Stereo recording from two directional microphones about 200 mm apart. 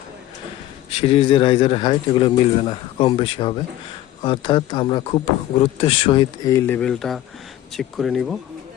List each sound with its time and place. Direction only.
0.9 s speech: 25° left (ahead or behind); by 8.4 s centre (ahead or behind)